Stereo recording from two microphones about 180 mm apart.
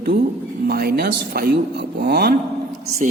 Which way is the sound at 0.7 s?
60° right (ahead or behind).